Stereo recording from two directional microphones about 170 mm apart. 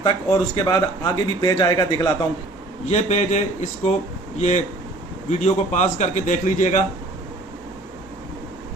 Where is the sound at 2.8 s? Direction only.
40° left (ahead or behind).